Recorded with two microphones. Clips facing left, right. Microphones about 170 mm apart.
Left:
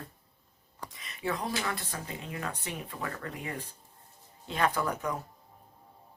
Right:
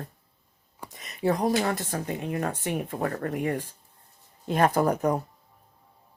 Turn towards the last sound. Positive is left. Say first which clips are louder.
# right 9 dB
turn(degrees=-40)  # may be behind; listen again after turning